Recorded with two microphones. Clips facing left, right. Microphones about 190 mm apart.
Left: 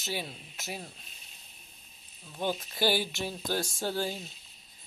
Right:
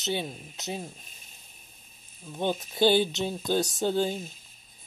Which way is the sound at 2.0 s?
50° right (ahead or behind).